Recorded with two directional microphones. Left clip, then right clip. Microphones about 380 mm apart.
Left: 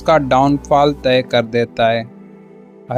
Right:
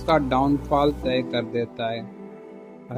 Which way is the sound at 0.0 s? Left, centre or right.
Left.